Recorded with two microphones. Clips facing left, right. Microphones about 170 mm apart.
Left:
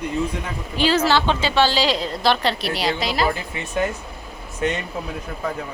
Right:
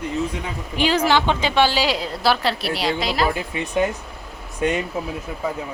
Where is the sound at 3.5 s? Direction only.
20° right (ahead or behind).